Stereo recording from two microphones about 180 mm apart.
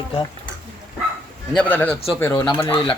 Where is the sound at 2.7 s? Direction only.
30° left (ahead or behind).